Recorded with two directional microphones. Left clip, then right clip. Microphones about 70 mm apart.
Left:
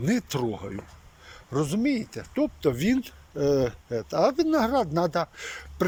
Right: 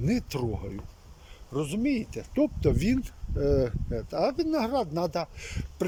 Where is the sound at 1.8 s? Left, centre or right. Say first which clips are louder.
Left 2 dB; right.